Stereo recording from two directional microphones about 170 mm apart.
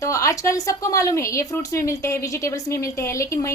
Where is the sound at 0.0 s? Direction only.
15° left (ahead or behind).